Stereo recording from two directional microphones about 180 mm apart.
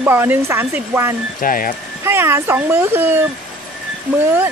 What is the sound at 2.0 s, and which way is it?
A child's voice, 15° right (ahead or behind).